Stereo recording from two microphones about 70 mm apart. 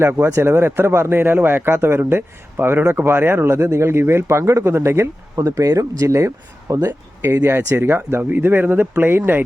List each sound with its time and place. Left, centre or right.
0.0 s speech: right
0.3 s speech: right